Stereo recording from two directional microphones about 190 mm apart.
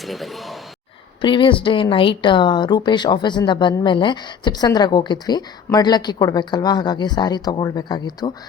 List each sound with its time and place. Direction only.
0.0 s speech: centre (ahead or behind)
1.2 s speech: 25° left (ahead or behind)